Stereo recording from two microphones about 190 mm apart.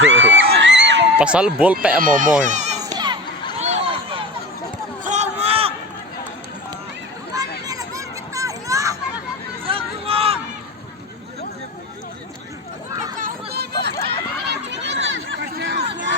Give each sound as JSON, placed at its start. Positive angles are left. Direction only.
{"t": 0.0, "sound": "a man's voice", "side_deg": -75}
{"t": 0.3, "sound": "a sound", "side_deg": -70}
{"t": 1.2, "sound": "speech", "side_deg": -5}
{"t": 2.0, "sound": "speech", "side_deg": -45}
{"t": 2.4, "sound": "baby cry", "side_deg": -40}
{"t": 2.8, "sound": "crowd", "side_deg": -20}
{"t": 3.6, "sound": "a sound", "side_deg": -30}
{"t": 7.7, "sound": "children playing", "side_deg": -15}
{"t": 9.6, "sound": "hubbub", "side_deg": -30}
{"t": 13.1, "sound": "a sound", "side_deg": -50}